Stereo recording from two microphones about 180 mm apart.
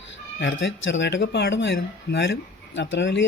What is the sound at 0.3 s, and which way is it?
A man's voice, 85° left.